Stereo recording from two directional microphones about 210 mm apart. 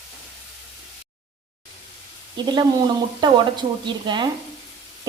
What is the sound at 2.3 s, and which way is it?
Speech, 20° right (ahead or behind).